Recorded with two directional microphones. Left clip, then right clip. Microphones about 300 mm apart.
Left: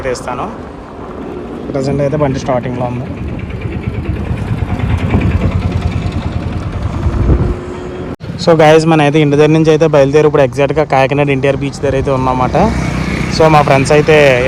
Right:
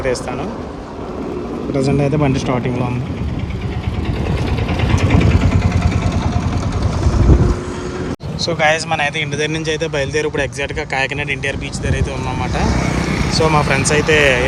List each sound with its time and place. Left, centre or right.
0.0 s speech: centre
1.7 s a man's voice: centre
4.9 s vehicle: right
8.7 s a man's voice: centre
12.7 s vehicle: right
13.3 s a man's voice: centre